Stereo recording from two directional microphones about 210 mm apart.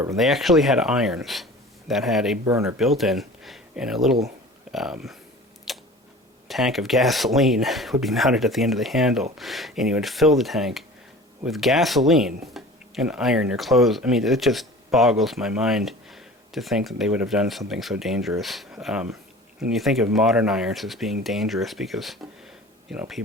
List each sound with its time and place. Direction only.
0.2 s speech: centre (ahead or behind)
2.4 s speech: 15° right (ahead or behind)
2.7 s speech: centre (ahead or behind)
5.7 s a sound: centre (ahead or behind)
6.5 s speech: centre (ahead or behind)